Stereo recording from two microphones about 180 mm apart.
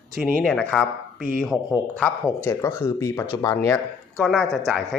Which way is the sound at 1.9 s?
10° left (ahead or behind).